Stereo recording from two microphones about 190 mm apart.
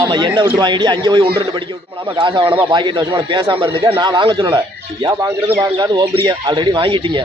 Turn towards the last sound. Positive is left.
turn(degrees=-25)  # may be behind; listen again after turning